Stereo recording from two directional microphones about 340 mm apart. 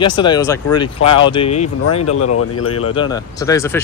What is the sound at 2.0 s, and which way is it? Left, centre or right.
Speech, left.